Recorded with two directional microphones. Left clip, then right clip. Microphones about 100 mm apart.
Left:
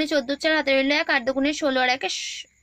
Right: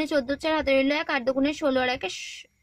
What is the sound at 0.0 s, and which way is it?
A woman's voice, 40° right (ahead or behind).